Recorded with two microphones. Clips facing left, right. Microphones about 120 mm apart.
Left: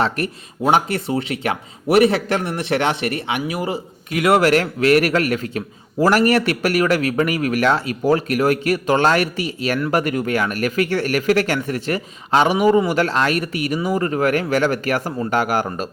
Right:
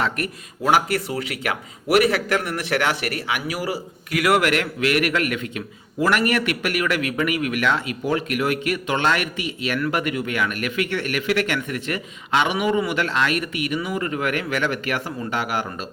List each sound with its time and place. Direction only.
0.0 s speech: 30° left (ahead or behind)